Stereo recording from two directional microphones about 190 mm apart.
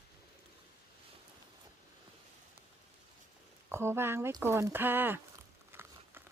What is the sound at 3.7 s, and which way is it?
Speech, 15° right (ahead or behind).